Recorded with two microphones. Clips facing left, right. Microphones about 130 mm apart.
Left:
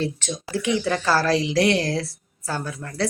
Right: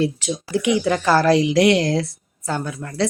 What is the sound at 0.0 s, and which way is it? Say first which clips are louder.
Speech: right 5 dB; 10° right (ahead or behind).